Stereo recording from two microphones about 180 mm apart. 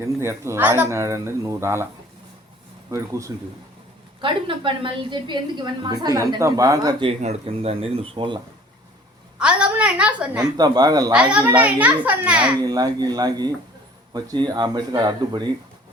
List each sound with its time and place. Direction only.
0.0 s speech: 15° right (ahead or behind)
2.9 s speech: 15° right (ahead or behind)
4.2 s a woman's voice: 30° right (ahead or behind)
7.2 s speech: 35° right (ahead or behind)
9.4 s a woman's voice: 5° right (ahead or behind)
10.6 s a woman's voice: 20° right (ahead or behind)
11.1 s speech: 5° right (ahead or behind)
12.6 s a woman's voice: 20° right (ahead or behind)